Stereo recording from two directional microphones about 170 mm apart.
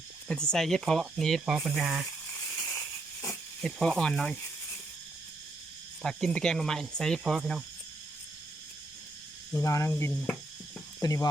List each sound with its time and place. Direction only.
0.3 s speech: 5° left (ahead or behind)
3.6 s speech: centre (ahead or behind)
6.0 s speech: 5° left (ahead or behind)
9.5 s speech: 15° left (ahead or behind)
11.0 s speech: 20° left (ahead or behind)